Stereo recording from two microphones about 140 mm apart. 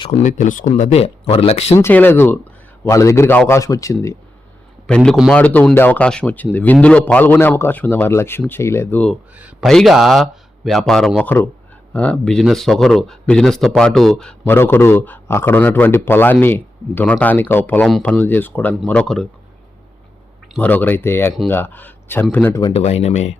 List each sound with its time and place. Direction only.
0.2 s speech: 65° left (ahead or behind)
0.7 s speech: 50° left (ahead or behind)
1.7 s a man's voice: 15° left (ahead or behind)
4.9 s speech: 5° left (ahead or behind)
9.3 s speech: 10° right (ahead or behind)
9.6 s speech: centre (ahead or behind)
14.4 s speech: 15° left (ahead or behind)
20.6 s speech: 10° left (ahead or behind)
22.7 s speech: 50° left (ahead or behind)